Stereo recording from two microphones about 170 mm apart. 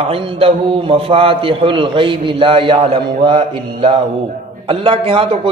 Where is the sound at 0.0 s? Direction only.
35° right (ahead or behind).